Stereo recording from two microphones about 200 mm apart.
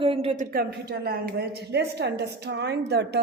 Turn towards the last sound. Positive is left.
turn(degrees=-55)  # may be behind; listen again after turning